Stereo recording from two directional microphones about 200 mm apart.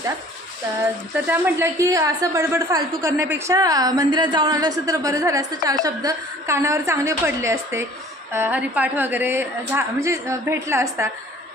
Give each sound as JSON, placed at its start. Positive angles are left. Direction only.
{"t": 1.3, "sound": "a woman's voice", "side_deg": -10}